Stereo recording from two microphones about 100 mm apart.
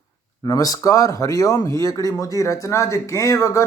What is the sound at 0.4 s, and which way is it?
Speech, 35° left (ahead or behind).